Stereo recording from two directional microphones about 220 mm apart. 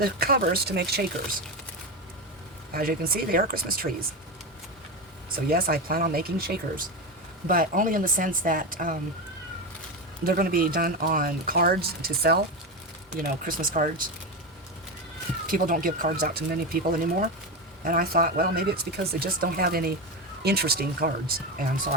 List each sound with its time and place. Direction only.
0.0 s speech: 45° right (ahead or behind)
2.7 s speech: 40° right (ahead or behind)
5.5 s speech: 40° right (ahead or behind)
10.2 s speech: 40° right (ahead or behind)
15.4 s speech: 40° right (ahead or behind)